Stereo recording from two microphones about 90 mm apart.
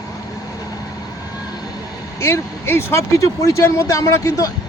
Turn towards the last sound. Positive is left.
turn(degrees=35)  # may be behind; listen again after turning